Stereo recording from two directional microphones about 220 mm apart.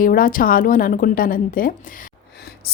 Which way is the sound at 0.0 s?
40° left (ahead or behind).